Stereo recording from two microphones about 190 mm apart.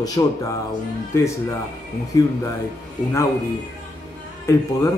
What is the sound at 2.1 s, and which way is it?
Speech, 20° left (ahead or behind).